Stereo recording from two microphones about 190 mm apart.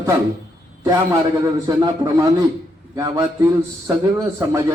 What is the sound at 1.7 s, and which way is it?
A man's voice, 20° right (ahead or behind).